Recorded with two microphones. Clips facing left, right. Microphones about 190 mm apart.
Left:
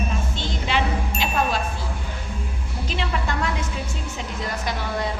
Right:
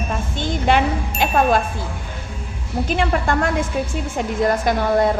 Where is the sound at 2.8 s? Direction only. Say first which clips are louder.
Right 7 dB; 50° right (ahead or behind).